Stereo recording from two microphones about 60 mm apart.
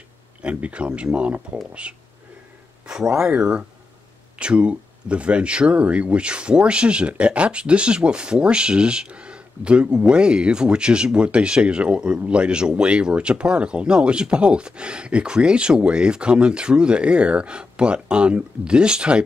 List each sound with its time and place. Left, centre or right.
0.4 s speech: right